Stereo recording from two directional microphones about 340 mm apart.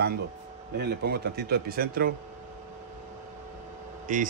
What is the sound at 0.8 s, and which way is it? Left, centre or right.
A man's voice, right.